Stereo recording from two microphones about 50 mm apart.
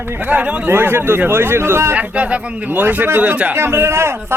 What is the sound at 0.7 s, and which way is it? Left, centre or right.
Speech, right.